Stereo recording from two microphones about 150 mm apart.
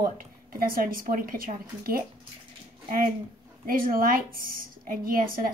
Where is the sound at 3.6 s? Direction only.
70° right (ahead or behind).